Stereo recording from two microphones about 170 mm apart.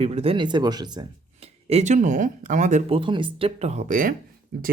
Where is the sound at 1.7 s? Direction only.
40° right (ahead or behind).